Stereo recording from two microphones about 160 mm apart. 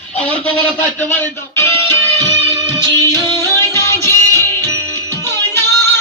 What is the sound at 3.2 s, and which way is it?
Music, 15° left (ahead or behind).